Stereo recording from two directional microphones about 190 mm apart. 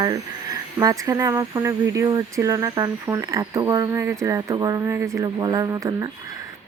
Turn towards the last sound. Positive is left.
turn(degrees=-20)  # may be behind; listen again after turning